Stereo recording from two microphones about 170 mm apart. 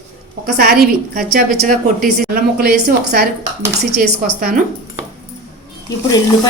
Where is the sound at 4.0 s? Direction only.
55° right (ahead or behind).